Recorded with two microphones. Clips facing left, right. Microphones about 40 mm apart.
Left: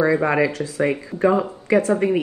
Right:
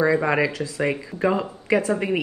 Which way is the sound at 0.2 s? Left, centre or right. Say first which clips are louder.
Left 2 dB; centre.